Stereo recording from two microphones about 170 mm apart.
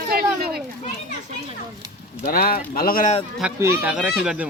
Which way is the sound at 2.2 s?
60° left (ahead or behind).